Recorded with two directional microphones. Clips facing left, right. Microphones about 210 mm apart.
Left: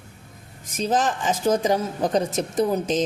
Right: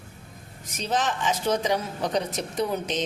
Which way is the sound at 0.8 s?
45° left (ahead or behind).